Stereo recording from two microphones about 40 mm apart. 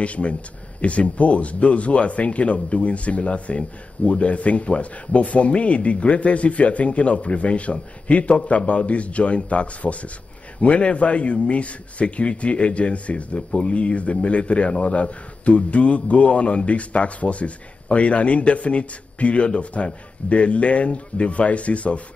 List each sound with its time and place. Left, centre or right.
0.0 s a man's voice: left